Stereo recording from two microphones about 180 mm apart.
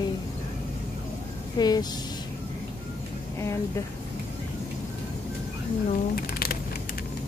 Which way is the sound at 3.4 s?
15° left (ahead or behind).